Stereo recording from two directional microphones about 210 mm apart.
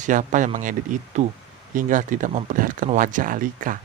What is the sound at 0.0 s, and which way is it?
A man's voice, 35° right (ahead or behind).